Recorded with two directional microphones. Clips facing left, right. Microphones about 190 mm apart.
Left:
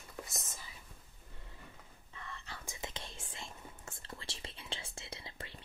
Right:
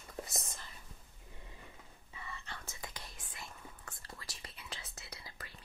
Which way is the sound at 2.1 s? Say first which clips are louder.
Even; 5° right (ahead or behind).